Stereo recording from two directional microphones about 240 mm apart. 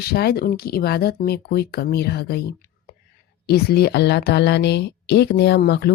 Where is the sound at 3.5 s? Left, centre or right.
Left.